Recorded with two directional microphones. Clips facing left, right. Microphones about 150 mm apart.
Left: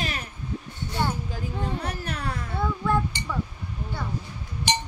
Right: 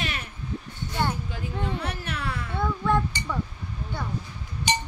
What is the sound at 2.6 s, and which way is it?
Speech, 5° left (ahead or behind).